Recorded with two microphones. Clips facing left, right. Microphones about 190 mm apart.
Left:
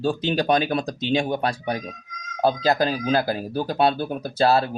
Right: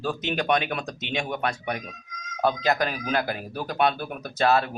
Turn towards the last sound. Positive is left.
turn(degrees=30)  # may be behind; listen again after turning